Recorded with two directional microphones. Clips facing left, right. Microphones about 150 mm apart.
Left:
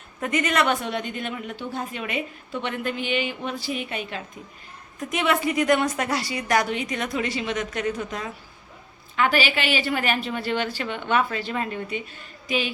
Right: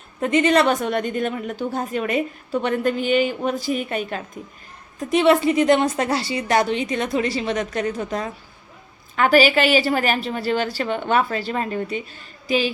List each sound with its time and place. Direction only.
0.2 s a woman's voice: 30° right (ahead or behind); by 4.2 s 45° right (ahead or behind)
4.9 s a woman's voice: 30° right (ahead or behind)